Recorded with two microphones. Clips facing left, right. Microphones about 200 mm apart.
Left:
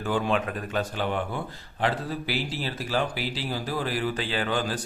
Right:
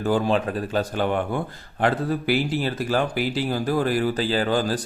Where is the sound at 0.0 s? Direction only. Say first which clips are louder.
Right 5 dB; 40° right (ahead or behind).